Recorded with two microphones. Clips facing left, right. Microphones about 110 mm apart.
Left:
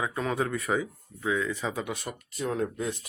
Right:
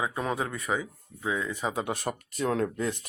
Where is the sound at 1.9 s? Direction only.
50° right (ahead or behind); by 2.9 s 70° right (ahead or behind).